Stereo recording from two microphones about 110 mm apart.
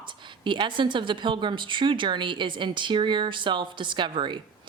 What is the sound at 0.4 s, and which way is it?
A woman's voice, 45° right (ahead or behind).